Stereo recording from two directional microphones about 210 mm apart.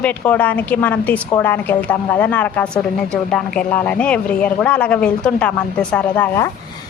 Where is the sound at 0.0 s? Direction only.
5° left (ahead or behind).